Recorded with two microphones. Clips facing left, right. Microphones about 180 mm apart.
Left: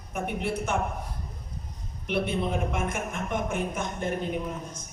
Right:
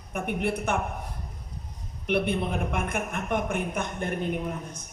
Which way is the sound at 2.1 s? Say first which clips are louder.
Right 1 dB; 55° right (ahead or behind).